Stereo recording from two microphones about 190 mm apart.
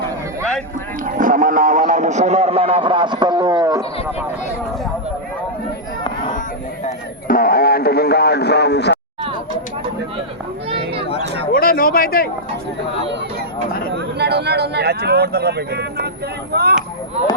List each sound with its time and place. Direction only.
1.0 s speech: 45° right (ahead or behind); by 3.8 s 15° right (ahead or behind)
6.0 s a sound: 25° left (ahead or behind)
6.8 s a man's voice: 50° left (ahead or behind)
10.7 s a sound: 30° right (ahead or behind)
11.5 s a man's voice: 50° left (ahead or behind)
13.9 s speech: 60° right (ahead or behind)